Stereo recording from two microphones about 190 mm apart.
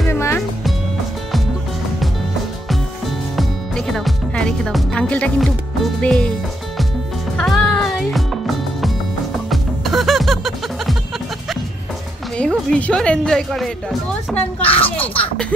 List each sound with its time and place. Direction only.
0.1 s music: 15° left (ahead or behind)
3.3 s music: centre (ahead or behind)
5.9 s speech: 5° left (ahead or behind)
7.3 s music: centre (ahead or behind)
12.4 s speech: 5° left (ahead or behind)
14.6 s a child's voice: 30° left (ahead or behind)
14.9 s speech: 10° left (ahead or behind)